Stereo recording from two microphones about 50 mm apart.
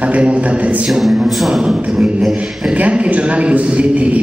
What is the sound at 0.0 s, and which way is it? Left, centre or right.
Speech, right.